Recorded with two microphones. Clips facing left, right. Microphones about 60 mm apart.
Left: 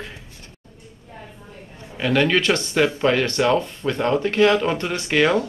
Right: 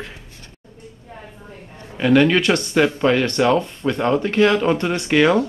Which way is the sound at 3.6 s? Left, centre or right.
Right.